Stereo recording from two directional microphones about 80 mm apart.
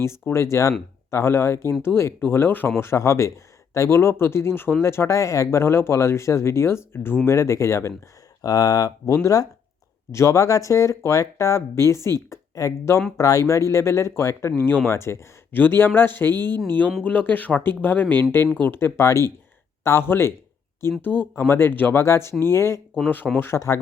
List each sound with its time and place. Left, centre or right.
0.0 s speech: left
8.4 s speech: left
16.3 s speech: right
17.0 s speech: centre
22.0 s speech: left